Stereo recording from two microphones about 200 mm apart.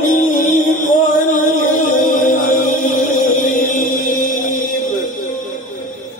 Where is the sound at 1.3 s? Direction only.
40° left (ahead or behind).